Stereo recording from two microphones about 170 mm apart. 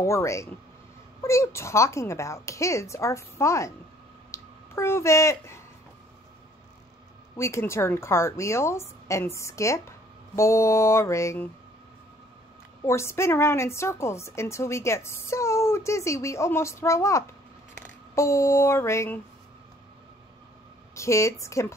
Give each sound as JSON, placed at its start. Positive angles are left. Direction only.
{"t": 0.0, "sound": "a woman's voice", "side_deg": 15}
{"t": 4.3, "sound": "a sound", "side_deg": 15}
{"t": 7.3, "sound": "a woman's voice", "side_deg": 15}
{"t": 12.8, "sound": "a woman's voice", "side_deg": 15}
{"t": 20.9, "sound": "a woman's voice", "side_deg": 15}